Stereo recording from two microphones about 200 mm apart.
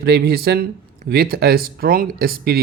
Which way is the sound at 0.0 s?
50° right (ahead or behind).